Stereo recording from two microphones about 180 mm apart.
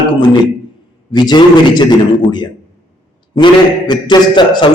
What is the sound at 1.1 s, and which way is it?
A man's voice, 25° left (ahead or behind).